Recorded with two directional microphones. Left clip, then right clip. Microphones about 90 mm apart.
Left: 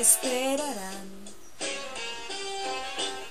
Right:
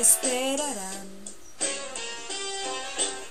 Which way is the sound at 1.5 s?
40° right (ahead or behind).